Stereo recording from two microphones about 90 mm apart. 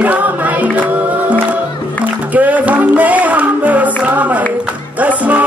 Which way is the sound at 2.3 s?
15° right (ahead or behind).